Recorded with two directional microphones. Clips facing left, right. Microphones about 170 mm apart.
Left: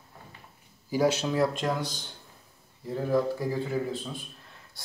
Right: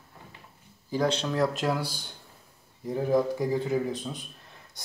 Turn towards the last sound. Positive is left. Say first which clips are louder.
# right 2 dB
turn(degrees=-20)  # may be behind; listen again after turning